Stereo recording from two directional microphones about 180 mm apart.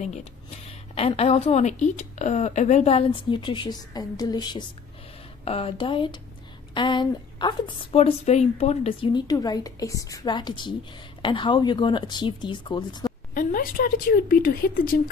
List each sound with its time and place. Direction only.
0.0 s a woman's voice: 35° left (ahead or behind)
13.3 s a woman's voice: 50° left (ahead or behind)